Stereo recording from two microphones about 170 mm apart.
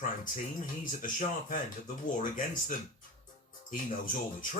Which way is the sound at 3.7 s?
50° left (ahead or behind).